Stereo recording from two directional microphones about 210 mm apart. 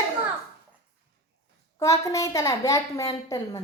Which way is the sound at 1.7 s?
15° left (ahead or behind).